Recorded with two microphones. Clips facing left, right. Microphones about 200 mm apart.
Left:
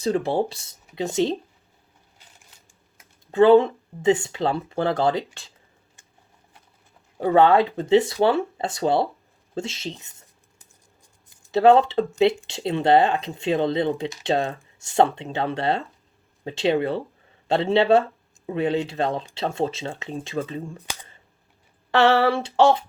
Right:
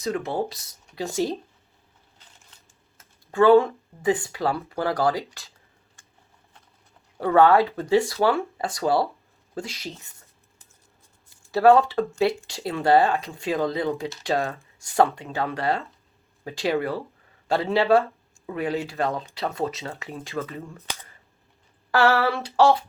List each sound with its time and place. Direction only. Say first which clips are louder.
0.0 s speech: left 4 dB; 30° left (ahead or behind)
3.0 s speech: left 3 dB; 20° left (ahead or behind)
7.2 s speech: left 1 dB; 20° left (ahead or behind)
11.3 s speech: left 1 dB; 20° left (ahead or behind)
21.9 s speech: left 3 dB; 25° left (ahead or behind)